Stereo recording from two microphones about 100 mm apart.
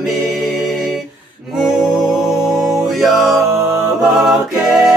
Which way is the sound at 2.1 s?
5° right (ahead or behind).